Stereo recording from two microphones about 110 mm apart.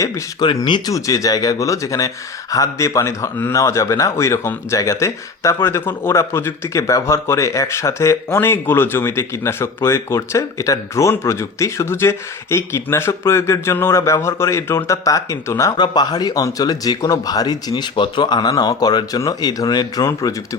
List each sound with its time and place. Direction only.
0.0 s speech: 30° left (ahead or behind)
0.4 s speech: 45° left (ahead or behind)
0.9 s a man's voice: 30° left (ahead or behind)
15.8 s speech: 40° left (ahead or behind)